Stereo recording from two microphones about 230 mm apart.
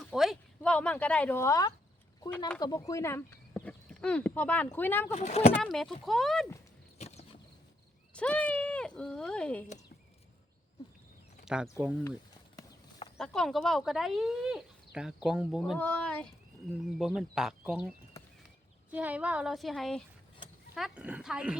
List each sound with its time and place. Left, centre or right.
0.0 s speech: centre
5.1 s speech: left
5.6 s speech: centre
8.1 s speech: centre
11.4 s speech: centre
13.1 s speech: centre